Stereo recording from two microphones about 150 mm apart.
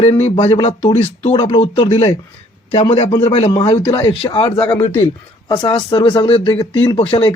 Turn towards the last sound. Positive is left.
turn(degrees=35)  # may be behind; listen again after turning